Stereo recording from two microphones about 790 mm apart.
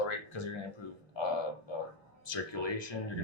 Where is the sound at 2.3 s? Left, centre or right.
Left.